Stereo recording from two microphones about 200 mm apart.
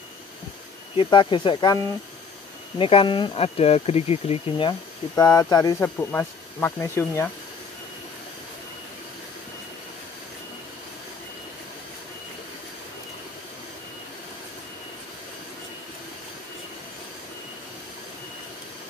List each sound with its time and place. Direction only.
0.9 s speech: 25° left (ahead or behind)
2.8 s speech: 25° left (ahead or behind)